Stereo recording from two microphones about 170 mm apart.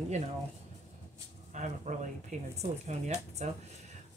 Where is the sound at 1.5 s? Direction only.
45° right (ahead or behind).